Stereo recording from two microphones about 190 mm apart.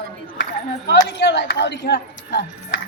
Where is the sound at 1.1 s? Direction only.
65° left (ahead or behind).